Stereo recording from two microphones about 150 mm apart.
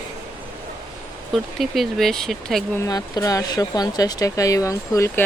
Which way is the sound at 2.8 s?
25° left (ahead or behind).